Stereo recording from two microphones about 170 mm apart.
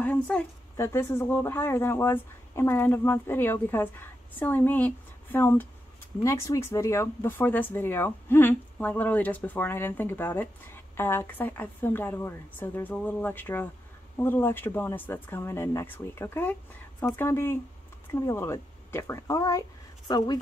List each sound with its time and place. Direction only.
0.0 s a woman's voice: 10° left (ahead or behind)